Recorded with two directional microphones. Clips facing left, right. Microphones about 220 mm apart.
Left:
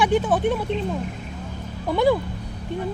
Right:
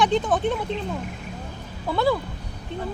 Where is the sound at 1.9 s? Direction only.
15° left (ahead or behind).